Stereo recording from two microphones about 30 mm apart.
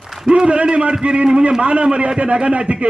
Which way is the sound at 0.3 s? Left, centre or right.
Right.